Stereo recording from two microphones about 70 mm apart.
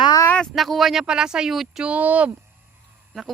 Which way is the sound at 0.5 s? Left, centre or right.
Centre.